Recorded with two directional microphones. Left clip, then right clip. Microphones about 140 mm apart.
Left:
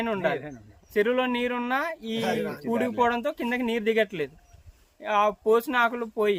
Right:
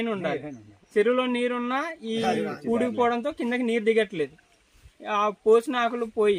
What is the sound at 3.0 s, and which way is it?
Speech, centre (ahead or behind).